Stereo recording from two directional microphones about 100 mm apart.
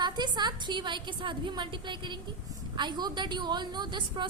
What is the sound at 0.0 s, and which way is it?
A woman's voice, 45° right (ahead or behind).